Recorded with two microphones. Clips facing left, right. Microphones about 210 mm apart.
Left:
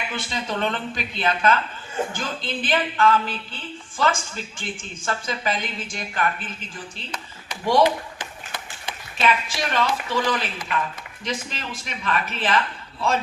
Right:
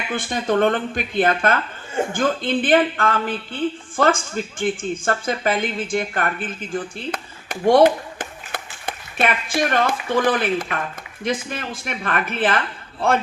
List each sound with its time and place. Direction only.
0.1 s a woman's voice: 50° right (ahead or behind)